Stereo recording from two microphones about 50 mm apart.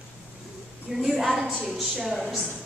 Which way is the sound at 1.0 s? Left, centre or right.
Centre.